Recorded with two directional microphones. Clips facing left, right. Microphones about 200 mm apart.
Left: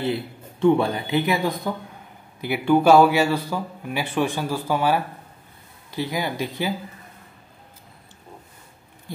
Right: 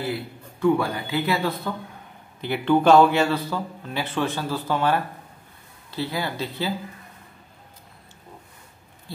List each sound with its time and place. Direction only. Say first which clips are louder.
0.0 s speech: left 3 dB; 25° left (ahead or behind)